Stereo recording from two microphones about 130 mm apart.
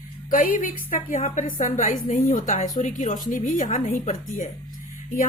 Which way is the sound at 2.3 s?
75° left (ahead or behind).